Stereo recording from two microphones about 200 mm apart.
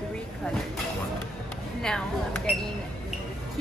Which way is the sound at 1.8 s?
5° left (ahead or behind).